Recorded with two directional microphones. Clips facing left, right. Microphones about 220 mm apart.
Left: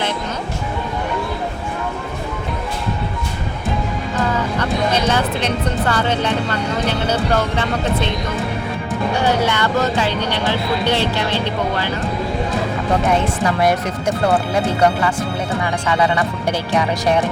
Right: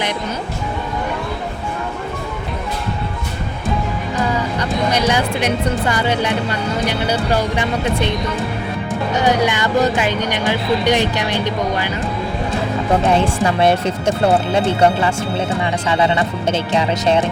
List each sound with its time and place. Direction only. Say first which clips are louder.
4.6 s speech: right 1 dB; 15° right (ahead or behind)
9.1 s speech: right 2 dB; 15° right (ahead or behind)
14.5 s speech: right 2 dB; 25° right (ahead or behind)